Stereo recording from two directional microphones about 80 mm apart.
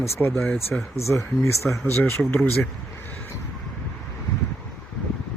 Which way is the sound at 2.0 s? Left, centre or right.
Left.